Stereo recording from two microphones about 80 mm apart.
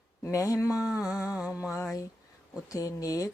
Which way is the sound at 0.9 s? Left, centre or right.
Centre.